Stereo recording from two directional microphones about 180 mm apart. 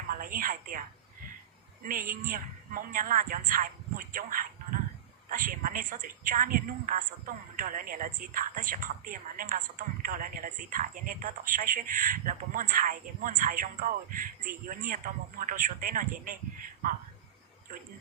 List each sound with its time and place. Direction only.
0.1 s a woman's voice: 50° right (ahead or behind)
1.8 s a woman's voice: 55° right (ahead or behind)